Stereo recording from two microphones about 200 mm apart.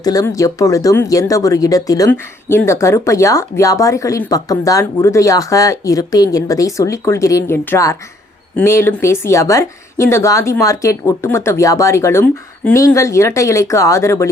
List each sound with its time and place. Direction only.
0.0 s speech: 20° left (ahead or behind)